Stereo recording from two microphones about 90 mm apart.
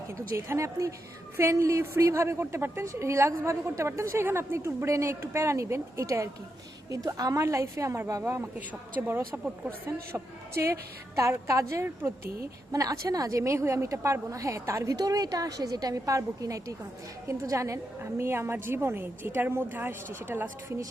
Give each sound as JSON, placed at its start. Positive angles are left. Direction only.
{"t": 0.1, "sound": "a woman's voice", "side_deg": -30}
{"t": 10.6, "sound": "a woman's voice", "side_deg": -35}
{"t": 12.7, "sound": "a woman's voice", "side_deg": -40}